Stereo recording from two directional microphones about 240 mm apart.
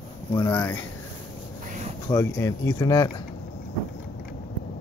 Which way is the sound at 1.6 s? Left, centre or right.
Right.